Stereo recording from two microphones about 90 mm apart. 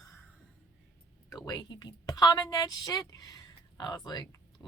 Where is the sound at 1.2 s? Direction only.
50° left (ahead or behind).